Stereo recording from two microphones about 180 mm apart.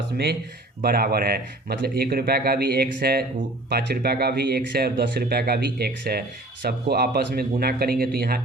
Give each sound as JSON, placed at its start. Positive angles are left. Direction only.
{"t": 0.8, "sound": "speech", "side_deg": -55}